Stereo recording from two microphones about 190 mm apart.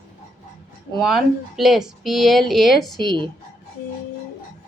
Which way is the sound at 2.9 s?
25° right (ahead or behind).